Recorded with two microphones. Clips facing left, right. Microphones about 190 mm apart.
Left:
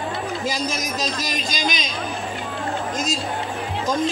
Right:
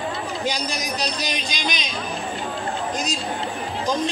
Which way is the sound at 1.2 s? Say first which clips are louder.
Left 2 dB; 45° left (ahead or behind).